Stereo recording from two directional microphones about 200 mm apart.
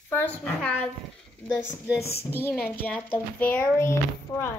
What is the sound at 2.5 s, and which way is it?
Speech, 10° left (ahead or behind).